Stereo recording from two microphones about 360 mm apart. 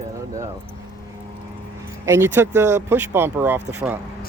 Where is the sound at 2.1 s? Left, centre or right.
Centre.